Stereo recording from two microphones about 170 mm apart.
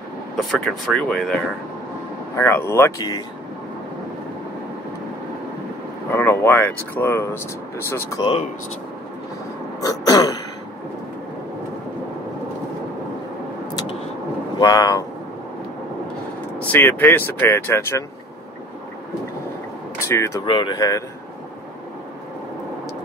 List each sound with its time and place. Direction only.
0.5 s speech: centre (ahead or behind)
2.3 s speech: 15° left (ahead or behind)
6.1 s speech: 15° left (ahead or behind)
8.2 s speech: 35° left (ahead or behind)
9.8 s throat clearing: 20° left (ahead or behind)
14.6 s speech: 20° left (ahead or behind)
16.5 s speech: 10° left (ahead or behind)
20.0 s speech: 15° left (ahead or behind)
20.4 s speech: 30° left (ahead or behind)